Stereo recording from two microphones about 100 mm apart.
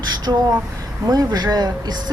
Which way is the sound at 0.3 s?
35° right (ahead or behind).